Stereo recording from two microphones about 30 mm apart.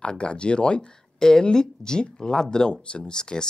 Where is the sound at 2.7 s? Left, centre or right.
Left.